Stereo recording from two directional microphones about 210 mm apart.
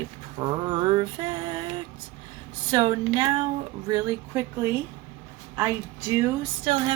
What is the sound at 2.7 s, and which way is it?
Speech, 20° right (ahead or behind).